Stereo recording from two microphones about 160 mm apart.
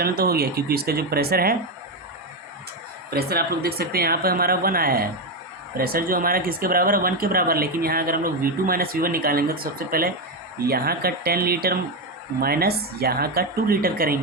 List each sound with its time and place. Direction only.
0.0 s speech: 75° right (ahead or behind)
3.1 s speech: 75° right (ahead or behind)